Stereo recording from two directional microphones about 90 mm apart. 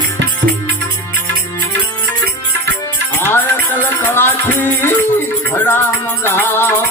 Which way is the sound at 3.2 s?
25° left (ahead or behind).